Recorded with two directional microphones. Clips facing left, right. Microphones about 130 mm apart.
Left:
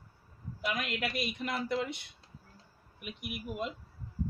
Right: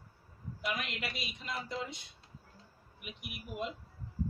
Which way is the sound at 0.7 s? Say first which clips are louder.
Left 4 dB; 50° left (ahead or behind).